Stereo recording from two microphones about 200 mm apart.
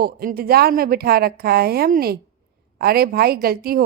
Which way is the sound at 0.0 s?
50° right (ahead or behind).